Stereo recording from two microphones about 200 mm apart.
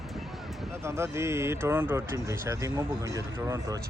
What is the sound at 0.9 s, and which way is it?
Speech, 15° right (ahead or behind).